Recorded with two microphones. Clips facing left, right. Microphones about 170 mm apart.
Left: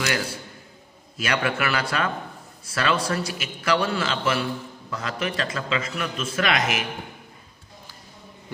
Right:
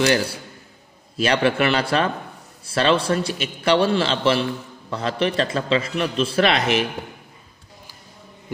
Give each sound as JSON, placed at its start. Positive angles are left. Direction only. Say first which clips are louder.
{"t": 1.1, "sound": "a man's voice", "louder": "right 6 dB", "side_deg": -30}